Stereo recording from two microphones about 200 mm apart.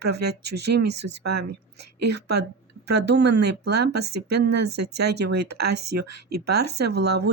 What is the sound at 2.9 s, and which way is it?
Speech, 55° right (ahead or behind).